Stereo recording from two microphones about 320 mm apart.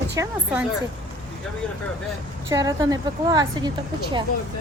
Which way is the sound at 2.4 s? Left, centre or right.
Centre.